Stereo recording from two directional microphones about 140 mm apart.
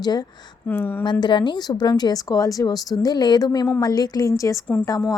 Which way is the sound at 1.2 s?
35° left (ahead or behind).